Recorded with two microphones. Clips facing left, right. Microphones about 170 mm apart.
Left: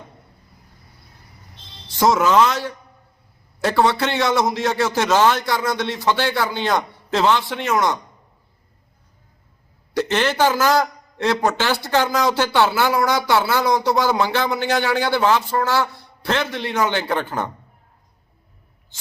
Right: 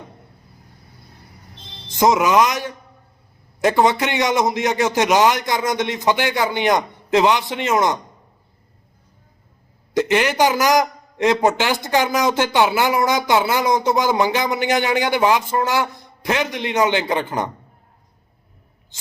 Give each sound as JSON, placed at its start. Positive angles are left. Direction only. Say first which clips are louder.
{"t": 2.0, "sound": "a man's voice", "louder": "even", "side_deg": -15}
{"t": 9.9, "sound": "a man's voice", "louder": "right 2 dB", "side_deg": -15}